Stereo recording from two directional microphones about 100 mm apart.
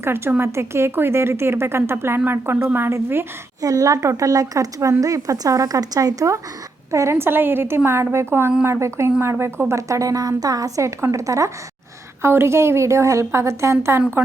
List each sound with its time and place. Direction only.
0.0 s speech: 25° right (ahead or behind)
3.6 s speech: 35° right (ahead or behind)